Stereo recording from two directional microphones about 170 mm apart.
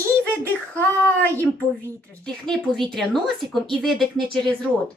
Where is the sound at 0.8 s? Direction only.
10° left (ahead or behind).